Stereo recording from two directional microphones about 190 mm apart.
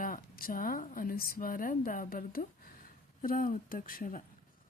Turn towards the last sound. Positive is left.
turn(degrees=45)  # may be behind; listen again after turning